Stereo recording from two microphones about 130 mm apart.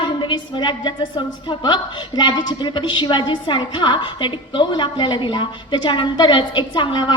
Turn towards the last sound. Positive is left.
turn(degrees=35)  # may be behind; listen again after turning